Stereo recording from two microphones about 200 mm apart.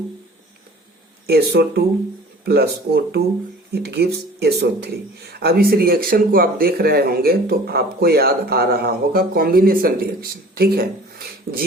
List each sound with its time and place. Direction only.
1.3 s speech: 50° right (ahead or behind)